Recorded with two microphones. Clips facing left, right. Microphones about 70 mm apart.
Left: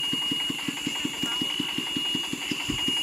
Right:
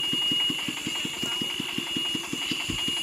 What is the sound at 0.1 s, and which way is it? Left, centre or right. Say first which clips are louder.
Engine: right 2 dB; centre.